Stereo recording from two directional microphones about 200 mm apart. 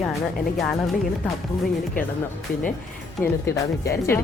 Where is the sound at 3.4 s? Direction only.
15° left (ahead or behind).